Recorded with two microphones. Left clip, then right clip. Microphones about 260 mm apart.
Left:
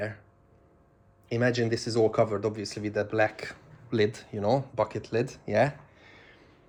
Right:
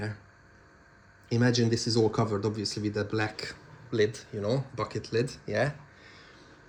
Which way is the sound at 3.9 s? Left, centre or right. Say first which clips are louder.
Left 1 dB; centre.